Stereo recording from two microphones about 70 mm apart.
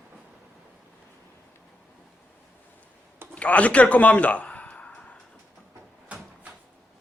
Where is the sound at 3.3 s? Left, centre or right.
Centre.